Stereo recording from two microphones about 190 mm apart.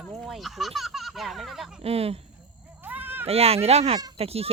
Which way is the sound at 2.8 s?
10° right (ahead or behind).